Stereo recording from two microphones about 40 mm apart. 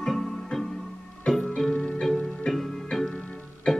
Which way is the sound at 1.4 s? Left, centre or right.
Left.